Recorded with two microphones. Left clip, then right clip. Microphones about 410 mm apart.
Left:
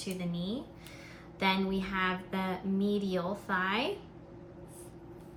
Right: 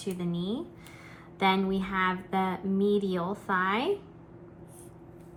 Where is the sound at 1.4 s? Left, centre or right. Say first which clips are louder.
Right 4 dB; centre.